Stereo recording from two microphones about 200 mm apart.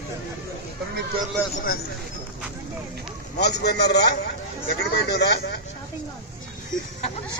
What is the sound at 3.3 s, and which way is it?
A man's voice, 55° left (ahead or behind).